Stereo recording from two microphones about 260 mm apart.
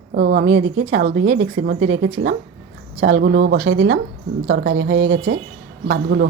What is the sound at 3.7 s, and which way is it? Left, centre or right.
A woman's voice, right.